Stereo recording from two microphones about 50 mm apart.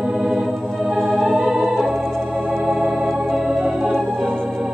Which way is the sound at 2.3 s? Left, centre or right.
Right.